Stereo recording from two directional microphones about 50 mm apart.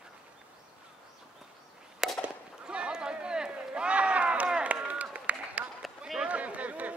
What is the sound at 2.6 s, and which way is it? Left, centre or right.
Run, centre.